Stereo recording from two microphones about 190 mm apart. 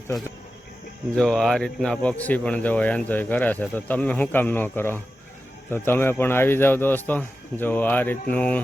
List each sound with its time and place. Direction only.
1.1 s speech: 5° left (ahead or behind)